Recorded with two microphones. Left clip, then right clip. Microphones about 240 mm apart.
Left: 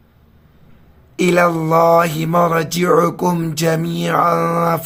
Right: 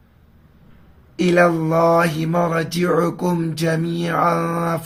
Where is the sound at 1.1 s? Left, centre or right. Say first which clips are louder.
Left 2 dB; left.